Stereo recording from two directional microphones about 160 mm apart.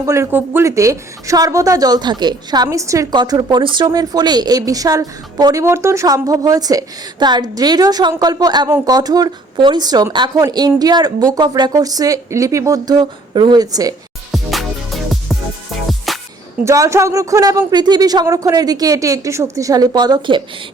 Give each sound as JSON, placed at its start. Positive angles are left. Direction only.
{"t": 0.0, "sound": "a woman's voice", "side_deg": -20}
{"t": 14.3, "sound": "music", "side_deg": 0}
{"t": 16.6, "sound": "a woman's voice", "side_deg": -20}